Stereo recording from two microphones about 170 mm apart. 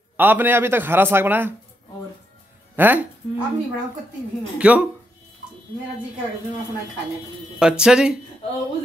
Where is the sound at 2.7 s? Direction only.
10° right (ahead or behind).